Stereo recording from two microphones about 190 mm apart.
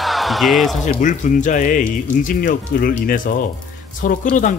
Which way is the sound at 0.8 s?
40° left (ahead or behind).